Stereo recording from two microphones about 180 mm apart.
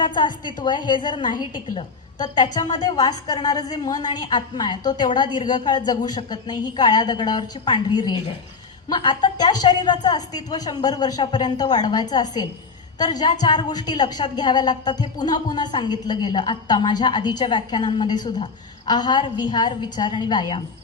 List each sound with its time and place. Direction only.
0.0 s a woman's voice: 25° left (ahead or behind)